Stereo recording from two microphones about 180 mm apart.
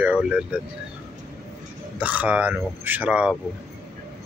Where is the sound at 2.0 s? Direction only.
10° right (ahead or behind).